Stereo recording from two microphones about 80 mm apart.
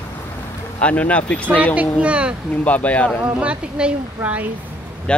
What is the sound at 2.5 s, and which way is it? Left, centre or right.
Speech, centre.